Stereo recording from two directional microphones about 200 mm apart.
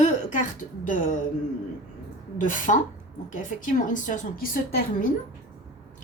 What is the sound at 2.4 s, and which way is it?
A woman's voice, 40° left (ahead or behind).